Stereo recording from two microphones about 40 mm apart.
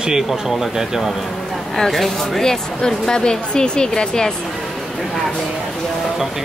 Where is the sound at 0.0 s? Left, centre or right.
Centre.